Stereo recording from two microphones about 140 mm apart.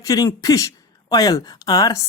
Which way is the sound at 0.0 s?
25° left (ahead or behind).